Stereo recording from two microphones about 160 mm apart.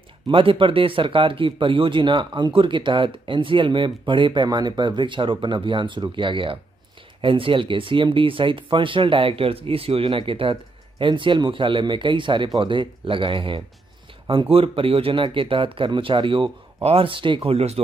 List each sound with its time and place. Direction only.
0.3 s speech: 30° right (ahead or behind)